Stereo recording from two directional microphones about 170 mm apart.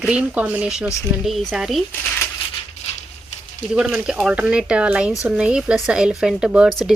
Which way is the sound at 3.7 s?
5° right (ahead or behind).